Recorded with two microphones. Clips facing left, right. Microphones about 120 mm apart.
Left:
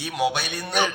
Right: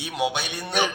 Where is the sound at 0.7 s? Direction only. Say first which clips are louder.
Left 1 dB; centre (ahead or behind).